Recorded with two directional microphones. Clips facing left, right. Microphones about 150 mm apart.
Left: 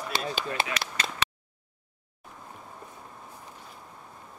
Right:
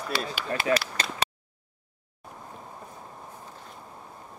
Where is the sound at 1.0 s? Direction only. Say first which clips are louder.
Right 1 dB; 35° right (ahead or behind).